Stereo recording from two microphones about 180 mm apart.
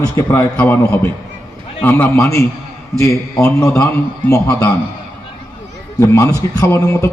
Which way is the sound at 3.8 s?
15° left (ahead or behind).